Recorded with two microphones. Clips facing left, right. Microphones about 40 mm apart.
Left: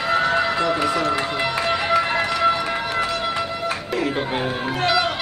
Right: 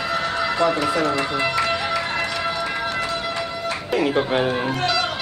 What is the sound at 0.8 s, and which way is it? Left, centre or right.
Speech, centre.